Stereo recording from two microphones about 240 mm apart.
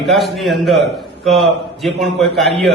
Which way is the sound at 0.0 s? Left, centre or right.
Centre.